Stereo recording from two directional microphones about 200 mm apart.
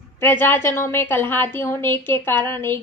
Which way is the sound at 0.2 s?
10° left (ahead or behind).